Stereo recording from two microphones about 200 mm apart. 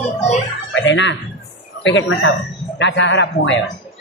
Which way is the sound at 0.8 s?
65° left (ahead or behind).